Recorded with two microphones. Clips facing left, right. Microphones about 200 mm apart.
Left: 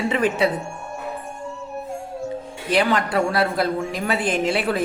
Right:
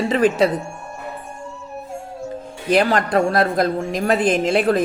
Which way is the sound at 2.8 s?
40° right (ahead or behind).